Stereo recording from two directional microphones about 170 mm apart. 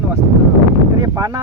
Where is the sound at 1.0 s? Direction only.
20° right (ahead or behind).